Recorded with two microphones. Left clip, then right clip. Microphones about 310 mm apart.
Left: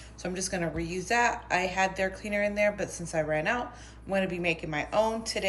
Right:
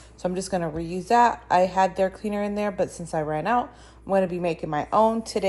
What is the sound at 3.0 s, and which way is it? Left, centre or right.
Speech, right.